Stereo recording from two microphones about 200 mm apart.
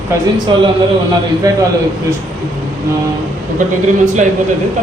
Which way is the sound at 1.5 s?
20° right (ahead or behind).